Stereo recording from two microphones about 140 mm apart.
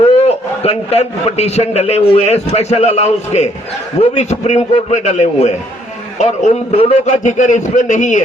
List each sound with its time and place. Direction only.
0.2 s a man's voice: 45° left (ahead or behind)
7.1 s a man's voice: 60° left (ahead or behind)